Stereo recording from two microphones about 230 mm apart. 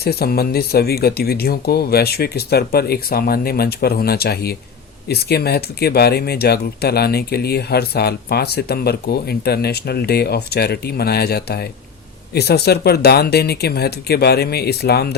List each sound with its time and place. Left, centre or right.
0.0 s speech: left